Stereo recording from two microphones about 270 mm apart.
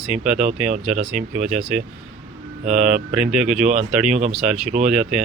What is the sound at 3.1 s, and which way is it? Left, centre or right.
Speech, centre.